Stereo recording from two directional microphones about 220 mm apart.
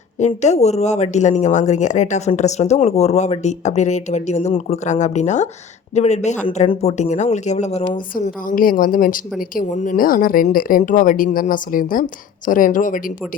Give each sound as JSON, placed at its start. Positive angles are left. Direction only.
{"t": 0.2, "sound": "speech", "side_deg": 30}